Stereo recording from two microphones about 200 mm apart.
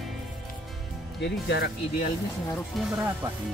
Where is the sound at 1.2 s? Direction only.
60° left (ahead or behind).